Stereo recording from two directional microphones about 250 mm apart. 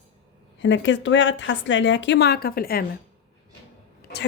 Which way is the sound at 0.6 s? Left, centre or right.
Left.